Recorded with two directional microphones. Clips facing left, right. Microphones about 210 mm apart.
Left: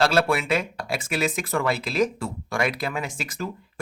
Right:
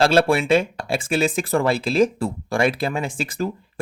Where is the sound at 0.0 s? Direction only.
30° right (ahead or behind).